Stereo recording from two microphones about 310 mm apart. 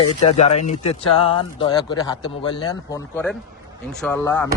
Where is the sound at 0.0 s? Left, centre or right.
Left.